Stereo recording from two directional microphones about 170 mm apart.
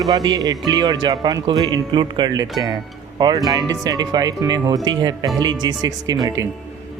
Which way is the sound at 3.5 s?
20° right (ahead or behind).